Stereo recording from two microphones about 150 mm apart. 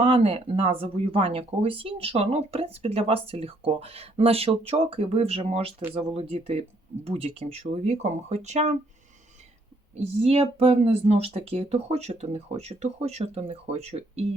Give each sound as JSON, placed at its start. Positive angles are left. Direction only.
{"t": 0.0, "sound": "speech", "side_deg": -40}
{"t": 9.9, "sound": "speech", "side_deg": -45}